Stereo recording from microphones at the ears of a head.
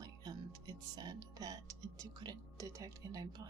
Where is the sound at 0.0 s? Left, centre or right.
Right.